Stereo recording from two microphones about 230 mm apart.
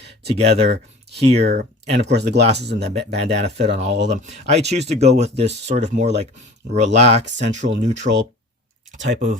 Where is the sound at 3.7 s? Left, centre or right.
Right.